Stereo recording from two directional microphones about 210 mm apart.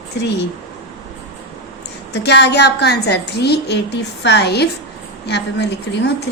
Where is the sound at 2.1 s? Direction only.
50° left (ahead or behind).